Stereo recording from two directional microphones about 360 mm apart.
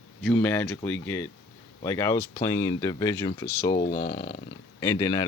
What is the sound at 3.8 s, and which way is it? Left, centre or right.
Speech, left.